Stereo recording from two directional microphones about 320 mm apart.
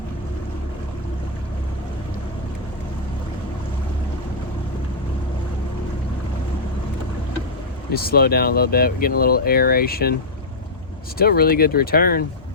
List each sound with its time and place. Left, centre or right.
7.9 s speech: left
11.2 s speech: left